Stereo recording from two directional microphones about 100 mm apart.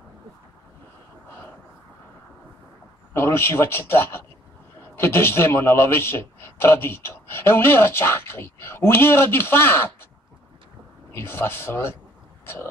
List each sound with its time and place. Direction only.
3.1 s a man's voice: 25° left (ahead or behind)
11.1 s a man's voice: 20° left (ahead or behind)